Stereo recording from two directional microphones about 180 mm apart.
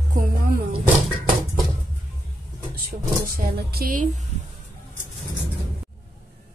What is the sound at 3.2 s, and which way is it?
Roaring cats, 50° right (ahead or behind).